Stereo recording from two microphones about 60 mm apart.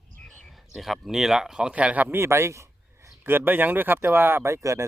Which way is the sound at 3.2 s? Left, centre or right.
Right.